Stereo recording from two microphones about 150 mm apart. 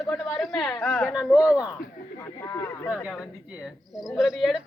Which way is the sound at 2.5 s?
15° left (ahead or behind).